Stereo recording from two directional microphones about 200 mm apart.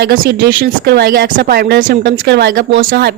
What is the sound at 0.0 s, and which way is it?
Speech, 55° right (ahead or behind).